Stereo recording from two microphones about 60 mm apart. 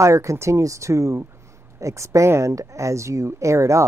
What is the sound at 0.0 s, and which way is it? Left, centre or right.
Speech, right.